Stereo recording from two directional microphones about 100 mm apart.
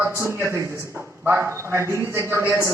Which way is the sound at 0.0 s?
25° right (ahead or behind).